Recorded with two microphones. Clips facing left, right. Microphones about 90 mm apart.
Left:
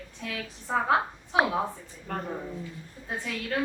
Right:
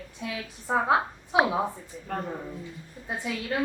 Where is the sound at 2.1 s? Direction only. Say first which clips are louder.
Right 1 dB; centre (ahead or behind).